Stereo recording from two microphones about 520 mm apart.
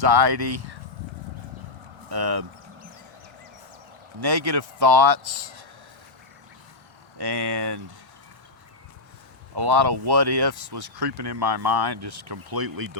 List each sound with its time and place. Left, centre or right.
0.0 s speech: right
2.0 s speech: right
4.2 s speech: right
7.2 s speech: right
9.6 s speech: right